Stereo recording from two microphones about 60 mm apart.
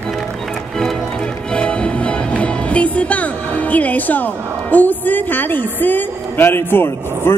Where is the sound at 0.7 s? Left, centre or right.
Centre.